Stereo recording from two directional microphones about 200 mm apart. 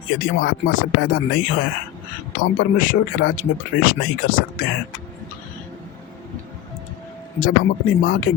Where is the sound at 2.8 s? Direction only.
45° left (ahead or behind).